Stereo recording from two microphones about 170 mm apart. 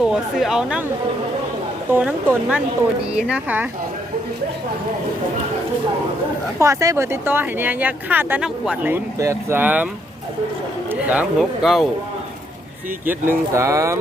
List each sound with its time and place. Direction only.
0.0 s speech: centre (ahead or behind)
1.9 s speech: 10° right (ahead or behind)
6.6 s speech: 20° right (ahead or behind); by 11.9 s centre (ahead or behind)
13.1 s speech: 15° right (ahead or behind)